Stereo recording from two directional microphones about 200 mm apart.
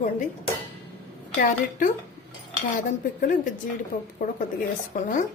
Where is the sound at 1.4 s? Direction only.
40° left (ahead or behind).